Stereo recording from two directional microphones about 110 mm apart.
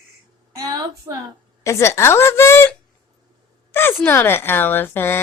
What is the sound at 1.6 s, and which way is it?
Speech, 25° left (ahead or behind).